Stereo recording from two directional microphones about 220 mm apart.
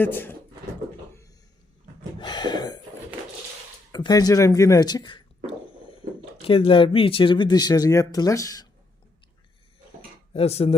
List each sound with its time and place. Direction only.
0.0 s speech: 10° left (ahead or behind)
2.1 s gasp: 20° left (ahead or behind)
3.9 s speech: 15° left (ahead or behind)
10.3 s speech: 25° left (ahead or behind)